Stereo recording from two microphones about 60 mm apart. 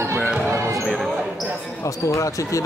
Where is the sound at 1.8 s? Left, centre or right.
Left.